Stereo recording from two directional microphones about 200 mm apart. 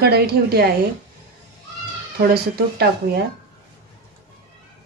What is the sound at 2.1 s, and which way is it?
Speech, 50° right (ahead or behind).